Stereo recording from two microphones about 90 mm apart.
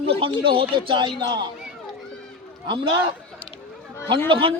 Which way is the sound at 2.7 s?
60° right (ahead or behind).